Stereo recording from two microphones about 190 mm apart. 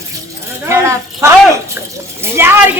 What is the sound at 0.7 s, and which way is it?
Speech, 15° right (ahead or behind).